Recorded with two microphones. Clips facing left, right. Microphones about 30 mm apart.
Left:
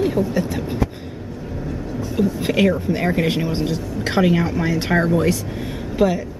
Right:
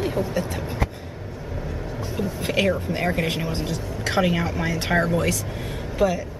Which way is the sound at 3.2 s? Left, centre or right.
Centre.